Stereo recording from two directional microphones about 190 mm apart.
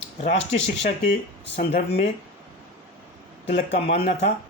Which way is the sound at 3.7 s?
35° left (ahead or behind).